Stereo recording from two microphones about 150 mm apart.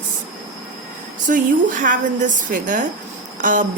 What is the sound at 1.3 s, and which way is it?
Speech, 60° right (ahead or behind).